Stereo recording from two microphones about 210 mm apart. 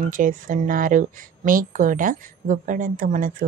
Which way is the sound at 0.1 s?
40° right (ahead or behind).